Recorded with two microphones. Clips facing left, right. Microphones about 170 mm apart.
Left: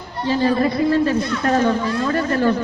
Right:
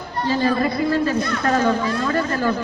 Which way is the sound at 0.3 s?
25° left (ahead or behind).